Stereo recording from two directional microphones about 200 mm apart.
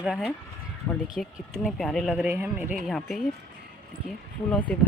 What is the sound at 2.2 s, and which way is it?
Speech, 10° right (ahead or behind).